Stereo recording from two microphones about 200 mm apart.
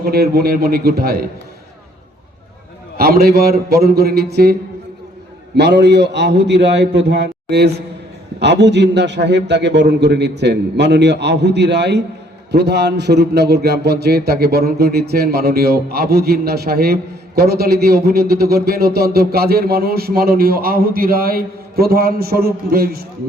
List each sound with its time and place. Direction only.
0.0 s a man's voice: 50° right (ahead or behind)
3.0 s a man's voice: 50° right (ahead or behind)
5.5 s a man's voice: 60° right (ahead or behind)